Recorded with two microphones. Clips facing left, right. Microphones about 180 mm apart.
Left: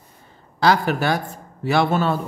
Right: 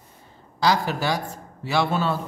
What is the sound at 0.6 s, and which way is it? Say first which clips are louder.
Speech: left 4 dB; 60° left (ahead or behind).